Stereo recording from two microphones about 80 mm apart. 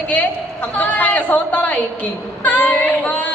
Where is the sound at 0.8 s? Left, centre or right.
Centre.